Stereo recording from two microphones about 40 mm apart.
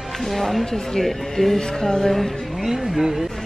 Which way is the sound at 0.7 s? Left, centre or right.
Centre.